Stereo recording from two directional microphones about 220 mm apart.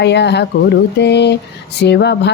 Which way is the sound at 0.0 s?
50° left (ahead or behind).